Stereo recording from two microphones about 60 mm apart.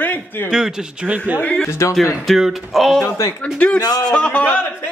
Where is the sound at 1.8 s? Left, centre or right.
Left.